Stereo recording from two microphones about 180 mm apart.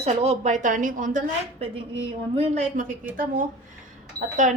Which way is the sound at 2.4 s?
40° right (ahead or behind).